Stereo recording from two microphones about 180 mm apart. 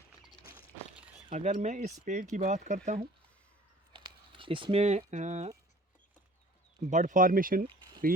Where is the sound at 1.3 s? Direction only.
40° right (ahead or behind).